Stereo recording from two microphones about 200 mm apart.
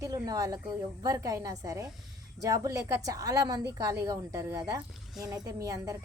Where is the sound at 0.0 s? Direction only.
20° right (ahead or behind).